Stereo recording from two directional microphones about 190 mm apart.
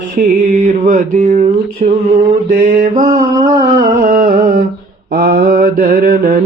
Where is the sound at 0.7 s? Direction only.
45° right (ahead or behind).